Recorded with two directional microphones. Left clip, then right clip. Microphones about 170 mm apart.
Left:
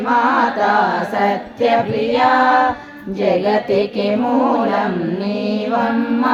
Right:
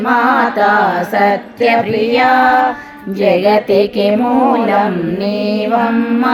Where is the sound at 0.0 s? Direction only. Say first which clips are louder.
Right 3 dB; 30° right (ahead or behind).